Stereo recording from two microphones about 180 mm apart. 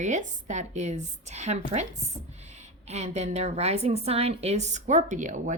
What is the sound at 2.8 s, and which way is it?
A woman's voice, 35° right (ahead or behind).